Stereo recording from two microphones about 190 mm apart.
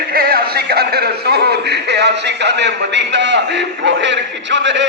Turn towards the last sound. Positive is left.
turn(degrees=-70)  # may be behind; listen again after turning